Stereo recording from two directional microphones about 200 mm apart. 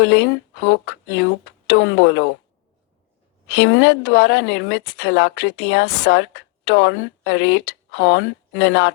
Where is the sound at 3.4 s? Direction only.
65° left (ahead or behind).